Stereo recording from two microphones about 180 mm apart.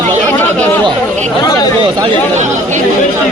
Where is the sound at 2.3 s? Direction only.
40° right (ahead or behind).